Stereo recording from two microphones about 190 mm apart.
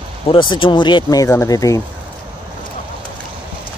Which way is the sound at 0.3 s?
25° left (ahead or behind).